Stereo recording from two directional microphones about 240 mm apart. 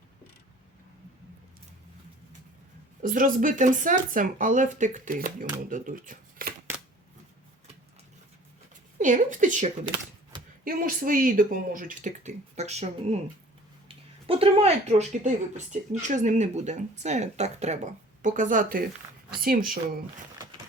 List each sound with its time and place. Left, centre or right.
3.0 s speech: right
9.0 s speech: right